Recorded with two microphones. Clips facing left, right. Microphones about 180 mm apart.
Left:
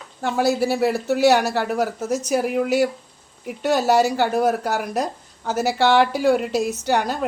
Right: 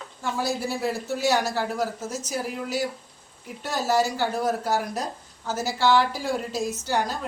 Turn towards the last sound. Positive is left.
turn(degrees=65)  # may be behind; listen again after turning